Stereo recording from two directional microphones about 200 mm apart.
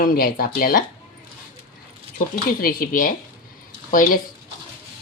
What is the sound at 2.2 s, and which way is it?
Speech, 45° left (ahead or behind).